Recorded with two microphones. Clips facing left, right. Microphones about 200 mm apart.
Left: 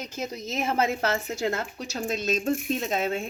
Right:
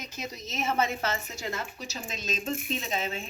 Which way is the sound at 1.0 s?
60° left (ahead or behind).